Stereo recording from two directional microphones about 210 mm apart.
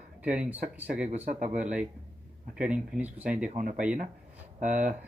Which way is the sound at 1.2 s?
35° right (ahead or behind).